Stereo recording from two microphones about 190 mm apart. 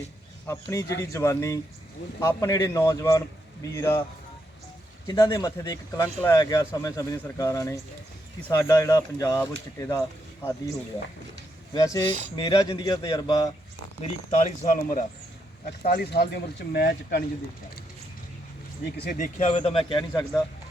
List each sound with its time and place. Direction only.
0.4 s speech: 15° left (ahead or behind)
5.0 s speech: 20° left (ahead or behind)
11.7 s speech: 15° left (ahead or behind)
14.0 s speech: 35° left (ahead or behind)
16.0 s speech: 60° left (ahead or behind)
19.0 s speech: 40° left (ahead or behind); by 20.2 s 25° left (ahead or behind)